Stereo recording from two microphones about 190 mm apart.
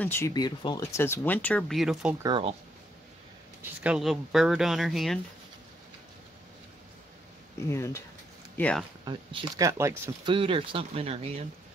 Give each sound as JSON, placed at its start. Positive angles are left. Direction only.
{"t": 0.0, "sound": "speech", "side_deg": 10}
{"t": 2.2, "sound": "speech", "side_deg": -25}
{"t": 3.8, "sound": "speech", "side_deg": -5}
{"t": 7.5, "sound": "speech", "side_deg": 15}
{"t": 9.0, "sound": "speech", "side_deg": -20}
{"t": 10.3, "sound": "speech", "side_deg": -30}